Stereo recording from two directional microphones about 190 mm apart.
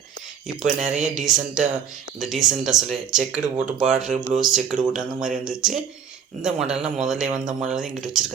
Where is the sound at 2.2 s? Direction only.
Centre (ahead or behind).